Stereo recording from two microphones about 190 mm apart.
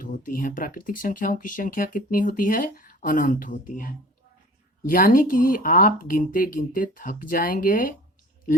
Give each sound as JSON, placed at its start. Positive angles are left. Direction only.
{"t": 0.0, "sound": "speech", "side_deg": 45}